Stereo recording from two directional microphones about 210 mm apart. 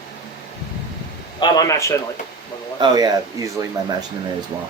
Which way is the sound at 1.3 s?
20° left (ahead or behind).